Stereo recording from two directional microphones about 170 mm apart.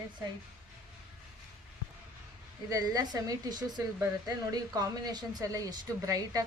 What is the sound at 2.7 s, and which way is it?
A woman's voice, 20° right (ahead or behind).